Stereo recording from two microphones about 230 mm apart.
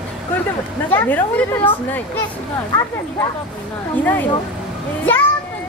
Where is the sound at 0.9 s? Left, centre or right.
Centre.